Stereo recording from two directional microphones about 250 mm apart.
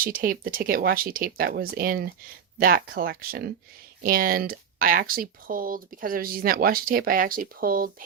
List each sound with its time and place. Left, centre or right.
0.0 s speech: right